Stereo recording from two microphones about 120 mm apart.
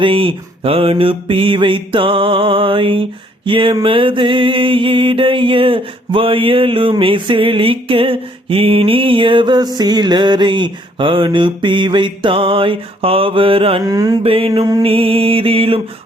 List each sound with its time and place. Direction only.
0.0 s mantra: 45° right (ahead or behind)
13.8 s mantra: 30° right (ahead or behind)
14.2 s mantra: 50° right (ahead or behind)
14.8 s mantra: 50° right (ahead or behind)